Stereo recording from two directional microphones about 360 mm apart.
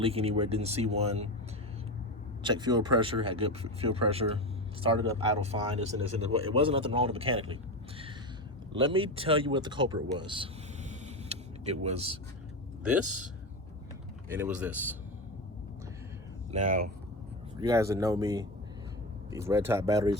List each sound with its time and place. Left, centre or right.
0.0 s a man's voice: centre
2.4 s a man's voice: centre
14.3 s speech: centre
16.5 s speech: right
17.6 s a man's voice: centre